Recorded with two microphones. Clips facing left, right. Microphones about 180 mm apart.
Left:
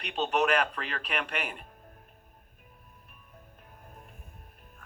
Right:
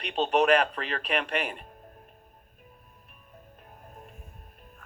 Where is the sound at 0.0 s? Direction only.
30° right (ahead or behind).